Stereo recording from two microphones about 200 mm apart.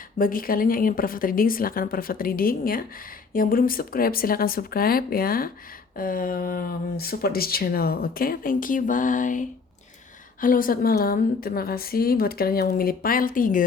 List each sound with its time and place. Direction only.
0.2 s speech: 45° left (ahead or behind)